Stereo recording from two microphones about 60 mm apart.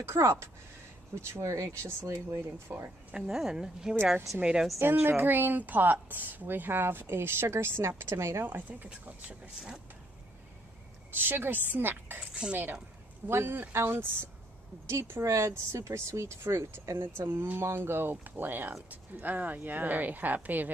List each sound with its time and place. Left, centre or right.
0.0 s speech: right
3.2 s speech: centre
4.7 s speech: right
8.5 s speech: right
11.1 s speech: right
12.2 s speech: centre
13.3 s speech: right
14.9 s speech: right
17.2 s speech: right